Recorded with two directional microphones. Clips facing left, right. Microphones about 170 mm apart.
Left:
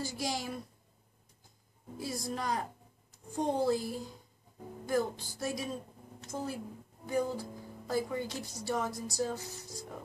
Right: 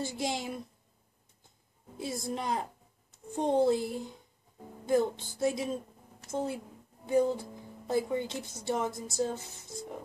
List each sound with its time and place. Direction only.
0.0 s speech: 25° right (ahead or behind)
2.0 s speech: 25° right (ahead or behind)